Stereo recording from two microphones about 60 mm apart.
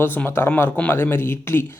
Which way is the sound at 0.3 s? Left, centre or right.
Left.